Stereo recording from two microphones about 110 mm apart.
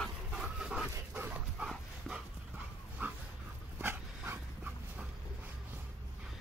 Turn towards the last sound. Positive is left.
turn(degrees=-15)  # may be behind; listen again after turning